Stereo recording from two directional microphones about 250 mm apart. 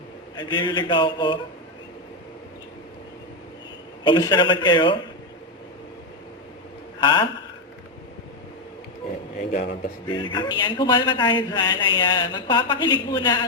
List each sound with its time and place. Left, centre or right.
0.3 s a man's voice: centre
4.0 s a man's voice: centre
7.0 s a man's voice: centre
9.5 s speech: left
10.1 s a man's voice: centre